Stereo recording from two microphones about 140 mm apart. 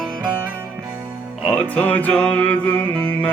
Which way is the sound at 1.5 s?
10° left (ahead or behind).